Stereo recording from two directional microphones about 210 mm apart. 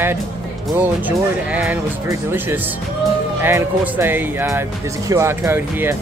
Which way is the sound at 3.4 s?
10° right (ahead or behind).